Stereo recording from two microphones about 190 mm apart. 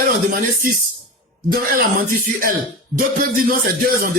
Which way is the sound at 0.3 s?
45° right (ahead or behind).